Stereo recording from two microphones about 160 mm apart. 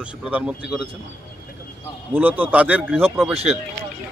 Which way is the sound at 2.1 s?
10° right (ahead or behind).